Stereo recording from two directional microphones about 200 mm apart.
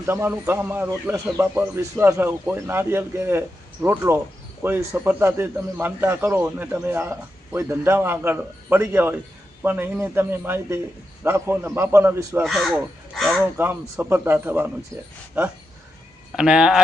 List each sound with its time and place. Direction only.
0.0 s a man's voice: 10° right (ahead or behind)
13.6 s a man's voice: 10° right (ahead or behind)
16.3 s speech: 5° right (ahead or behind)